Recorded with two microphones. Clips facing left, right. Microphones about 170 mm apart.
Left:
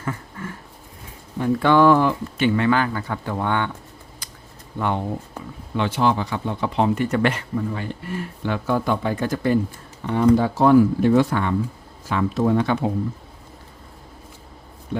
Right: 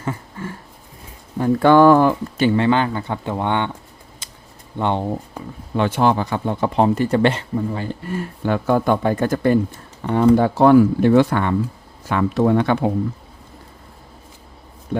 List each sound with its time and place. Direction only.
0.0 s a sound: 25° right (ahead or behind)
1.4 s a man's voice: 45° right (ahead or behind)
2.6 s speech: 25° right (ahead or behind)
4.2 s a sound: 25° right (ahead or behind)
4.8 s speech: 30° right (ahead or behind)
5.7 s a man's voice: 50° right (ahead or behind)